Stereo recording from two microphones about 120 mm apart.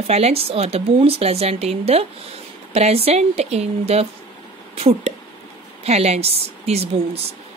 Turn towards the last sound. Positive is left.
turn(degrees=-60)  # may be behind; listen again after turning